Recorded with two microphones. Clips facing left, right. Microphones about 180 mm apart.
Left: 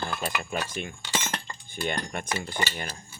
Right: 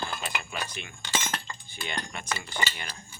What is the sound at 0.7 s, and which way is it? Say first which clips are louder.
Speech: left 2 dB; 45° left (ahead or behind).